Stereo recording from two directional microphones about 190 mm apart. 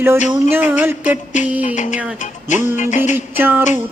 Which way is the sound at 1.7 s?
40° left (ahead or behind).